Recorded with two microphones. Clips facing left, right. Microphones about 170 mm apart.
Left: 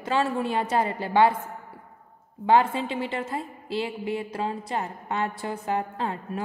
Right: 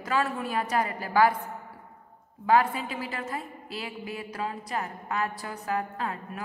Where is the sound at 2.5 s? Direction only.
25° left (ahead or behind).